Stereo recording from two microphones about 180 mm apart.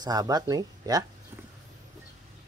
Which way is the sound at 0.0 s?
20° right (ahead or behind).